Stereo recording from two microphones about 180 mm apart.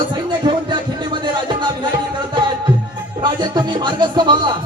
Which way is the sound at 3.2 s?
25° right (ahead or behind).